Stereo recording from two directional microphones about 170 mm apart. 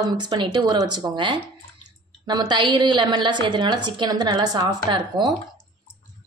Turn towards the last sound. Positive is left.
turn(degrees=-25)  # may be behind; listen again after turning